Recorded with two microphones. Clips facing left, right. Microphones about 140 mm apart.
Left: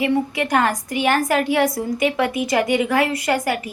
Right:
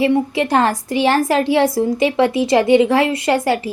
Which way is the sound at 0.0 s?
30° right (ahead or behind).